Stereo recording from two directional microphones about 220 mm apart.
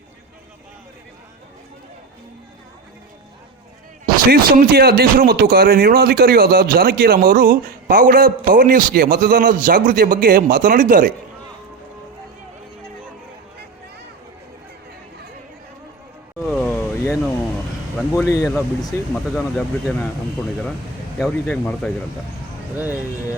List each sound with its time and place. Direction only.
4.0 s a man's voice: 40° right (ahead or behind)
16.4 s vehicle: centre (ahead or behind)
18.1 s speech: 15° left (ahead or behind)
19.1 s speech: centre (ahead or behind)
21.2 s speech: 5° left (ahead or behind)
22.7 s speech: 10° right (ahead or behind)